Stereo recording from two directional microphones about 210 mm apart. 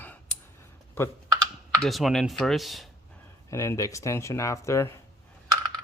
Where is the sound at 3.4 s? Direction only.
15° left (ahead or behind).